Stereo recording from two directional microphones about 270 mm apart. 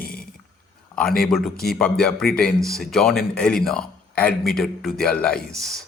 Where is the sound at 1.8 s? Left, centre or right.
Centre.